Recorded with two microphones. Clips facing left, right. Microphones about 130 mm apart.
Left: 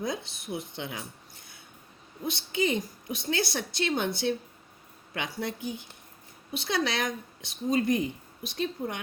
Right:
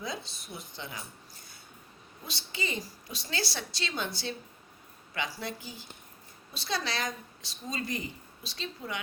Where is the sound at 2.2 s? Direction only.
55° left (ahead or behind).